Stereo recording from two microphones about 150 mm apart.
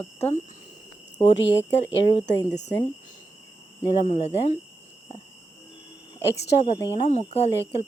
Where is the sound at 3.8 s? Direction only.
35° left (ahead or behind).